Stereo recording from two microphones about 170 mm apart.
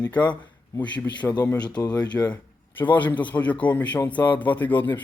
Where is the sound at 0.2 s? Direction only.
25° left (ahead or behind).